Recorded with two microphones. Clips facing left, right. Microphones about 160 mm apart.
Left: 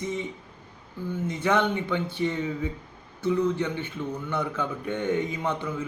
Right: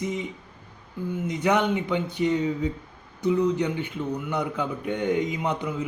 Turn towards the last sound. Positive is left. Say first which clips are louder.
# right 2 dB
turn(degrees=-15)  # may be behind; listen again after turning